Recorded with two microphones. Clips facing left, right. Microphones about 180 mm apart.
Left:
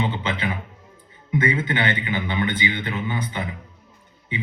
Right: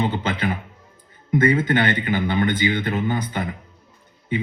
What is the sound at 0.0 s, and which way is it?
A man's voice, 40° right (ahead or behind).